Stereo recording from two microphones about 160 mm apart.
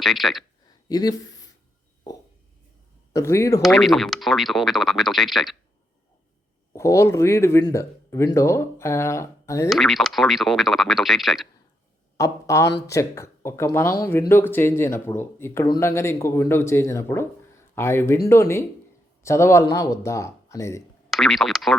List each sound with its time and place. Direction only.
0.0 s speech: centre (ahead or behind)
0.9 s speech: 25° left (ahead or behind)
3.2 s speech: 20° left (ahead or behind)
3.6 s speech: centre (ahead or behind)
6.7 s speech: 20° left (ahead or behind)
9.6 s speech: centre (ahead or behind)
12.1 s speech: 20° left (ahead or behind)
21.1 s speech: centre (ahead or behind)